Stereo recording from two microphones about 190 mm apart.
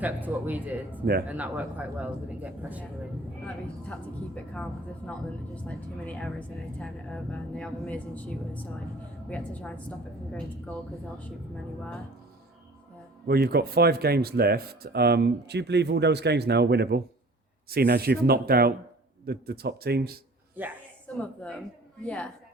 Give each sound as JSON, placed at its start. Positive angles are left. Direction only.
{"t": 0.0, "sound": "a man's voice", "side_deg": -10}
{"t": 4.5, "sound": "speech", "side_deg": 5}
{"t": 13.2, "sound": "speech", "side_deg": -55}
{"t": 20.6, "sound": "a man's voice", "side_deg": -10}
{"t": 21.2, "sound": "speech", "side_deg": 5}